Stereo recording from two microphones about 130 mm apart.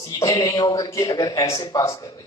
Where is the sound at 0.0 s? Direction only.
30° left (ahead or behind).